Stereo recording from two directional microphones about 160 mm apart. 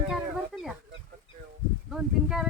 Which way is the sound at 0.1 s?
Centre (ahead or behind).